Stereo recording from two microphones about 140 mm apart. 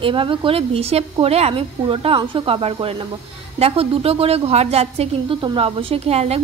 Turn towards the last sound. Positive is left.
turn(degrees=-50)  # may be behind; listen again after turning